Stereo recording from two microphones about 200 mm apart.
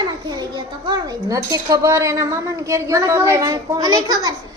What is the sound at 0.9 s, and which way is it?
Speech, 15° right (ahead or behind).